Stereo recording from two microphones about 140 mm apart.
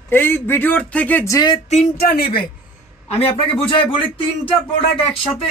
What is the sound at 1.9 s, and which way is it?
Speech, 90° left.